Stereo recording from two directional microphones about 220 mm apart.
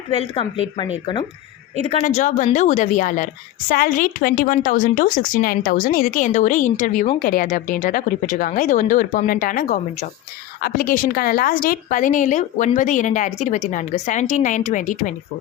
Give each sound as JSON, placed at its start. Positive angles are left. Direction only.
{"t": 1.7, "sound": "a woman's voice", "side_deg": -30}
{"t": 2.0, "sound": "speech", "side_deg": 35}